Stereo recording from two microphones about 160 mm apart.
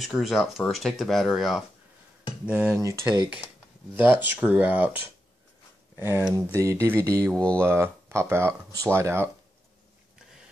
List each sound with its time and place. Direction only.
0.0 s speech: centre (ahead or behind)
2.8 s speech: 20° right (ahead or behind)
5.9 s speech: 15° right (ahead or behind)
7.2 s speech: 5° left (ahead or behind)
7.6 s speech: 15° right (ahead or behind)